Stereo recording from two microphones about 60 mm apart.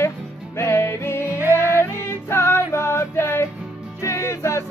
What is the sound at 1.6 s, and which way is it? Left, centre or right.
Music, left.